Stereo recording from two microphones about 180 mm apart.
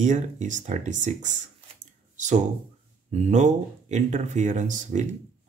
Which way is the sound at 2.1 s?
45° right (ahead or behind).